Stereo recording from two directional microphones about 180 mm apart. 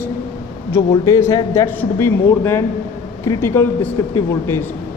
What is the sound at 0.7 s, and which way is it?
A man's voice, 15° left (ahead or behind).